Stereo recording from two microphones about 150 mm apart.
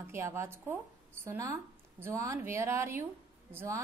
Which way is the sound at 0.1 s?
20° right (ahead or behind).